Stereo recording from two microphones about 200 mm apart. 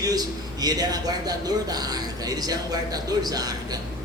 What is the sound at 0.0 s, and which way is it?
Speech, 20° right (ahead or behind).